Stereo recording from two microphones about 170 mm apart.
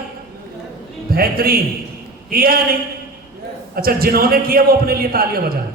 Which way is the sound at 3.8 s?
60° right (ahead or behind).